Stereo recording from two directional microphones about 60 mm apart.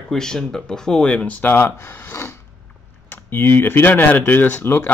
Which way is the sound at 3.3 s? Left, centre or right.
Left.